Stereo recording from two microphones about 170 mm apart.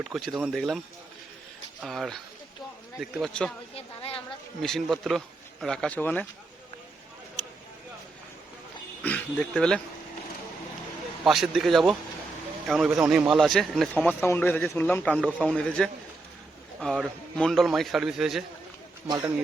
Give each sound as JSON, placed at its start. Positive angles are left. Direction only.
{"t": 0.0, "sound": "speech", "side_deg": 0}
{"t": 1.8, "sound": "speech", "side_deg": 0}
{"t": 3.8, "sound": "a woman's voice", "side_deg": 35}
{"t": 4.6, "sound": "speech", "side_deg": 0}
{"t": 9.0, "sound": "speech", "side_deg": 10}
{"t": 11.2, "sound": "speech", "side_deg": 0}
{"t": 19.0, "sound": "a man's voice", "side_deg": -25}